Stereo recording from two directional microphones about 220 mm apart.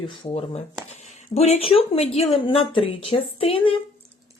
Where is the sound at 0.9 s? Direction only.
30° left (ahead or behind).